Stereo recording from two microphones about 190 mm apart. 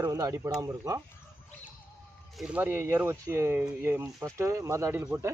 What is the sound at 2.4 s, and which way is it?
Speech, 5° right (ahead or behind).